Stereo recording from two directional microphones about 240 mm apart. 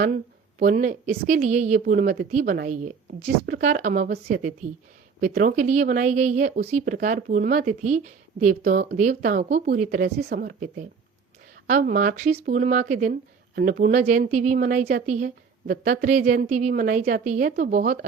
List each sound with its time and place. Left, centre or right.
0.6 s a woman's voice: right